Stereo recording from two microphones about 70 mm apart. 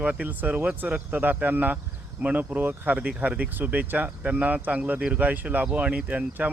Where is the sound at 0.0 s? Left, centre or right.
Right.